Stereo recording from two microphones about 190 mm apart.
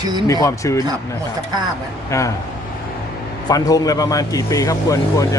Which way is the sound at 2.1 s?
15° left (ahead or behind).